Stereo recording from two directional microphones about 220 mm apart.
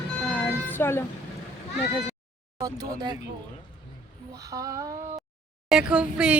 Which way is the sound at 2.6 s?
15° right (ahead or behind).